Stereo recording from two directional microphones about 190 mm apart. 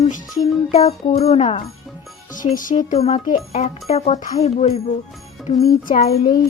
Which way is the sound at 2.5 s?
45° left (ahead or behind).